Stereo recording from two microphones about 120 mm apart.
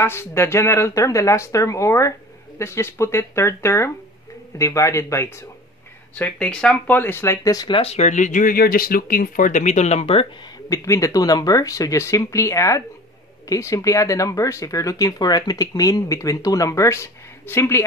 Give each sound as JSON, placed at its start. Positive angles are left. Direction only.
{"t": 0.0, "sound": "speech", "side_deg": 20}
{"t": 6.1, "sound": "speech", "side_deg": 10}
{"t": 7.7, "sound": "speech", "side_deg": 60}
{"t": 10.7, "sound": "speech", "side_deg": 25}